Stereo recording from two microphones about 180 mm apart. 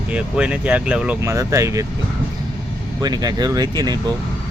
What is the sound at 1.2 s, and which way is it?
Speech, 15° right (ahead or behind).